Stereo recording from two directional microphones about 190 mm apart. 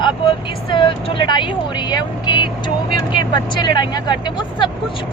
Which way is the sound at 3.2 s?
20° left (ahead or behind).